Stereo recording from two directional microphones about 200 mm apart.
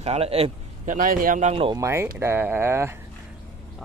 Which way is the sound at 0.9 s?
45° right (ahead or behind).